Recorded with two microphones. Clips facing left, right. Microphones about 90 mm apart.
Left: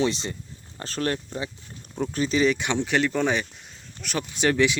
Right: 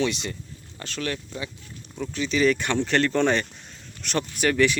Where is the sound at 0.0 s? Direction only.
30° left (ahead or behind).